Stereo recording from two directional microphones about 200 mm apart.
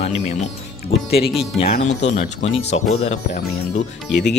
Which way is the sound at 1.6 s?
50° left (ahead or behind).